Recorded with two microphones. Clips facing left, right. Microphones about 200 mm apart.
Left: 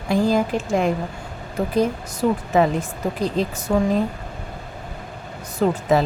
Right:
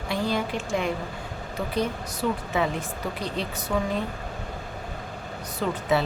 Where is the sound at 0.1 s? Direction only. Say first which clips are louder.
Left 8 dB; 40° left (ahead or behind).